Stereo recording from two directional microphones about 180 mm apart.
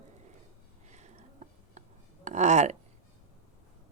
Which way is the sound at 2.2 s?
40° right (ahead or behind).